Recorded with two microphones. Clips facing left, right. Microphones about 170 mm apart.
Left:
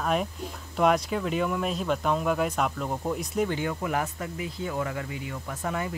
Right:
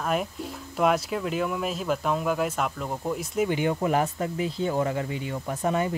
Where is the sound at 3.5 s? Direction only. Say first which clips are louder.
Right 5 dB; 20° right (ahead or behind).